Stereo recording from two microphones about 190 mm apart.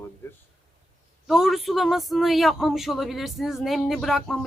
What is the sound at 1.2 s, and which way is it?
Speech, centre (ahead or behind).